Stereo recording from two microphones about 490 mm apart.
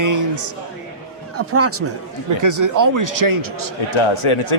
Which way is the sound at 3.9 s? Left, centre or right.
Left.